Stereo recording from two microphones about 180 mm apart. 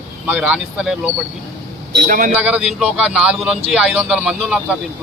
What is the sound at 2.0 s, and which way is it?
Speech, 50° right (ahead or behind).